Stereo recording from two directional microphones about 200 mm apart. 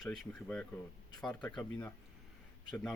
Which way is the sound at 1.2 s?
5° left (ahead or behind).